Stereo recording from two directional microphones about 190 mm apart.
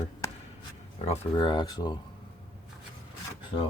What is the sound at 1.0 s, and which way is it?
Speech, 35° left (ahead or behind).